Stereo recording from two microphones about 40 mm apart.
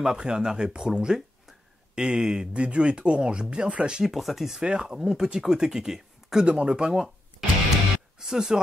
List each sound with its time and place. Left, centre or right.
0.0 s speech: centre
4.0 s speech: centre
4.6 s speech: right
6.4 s speech: right
8.2 s speech: centre